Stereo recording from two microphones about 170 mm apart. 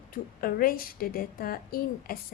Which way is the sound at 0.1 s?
60° left (ahead or behind).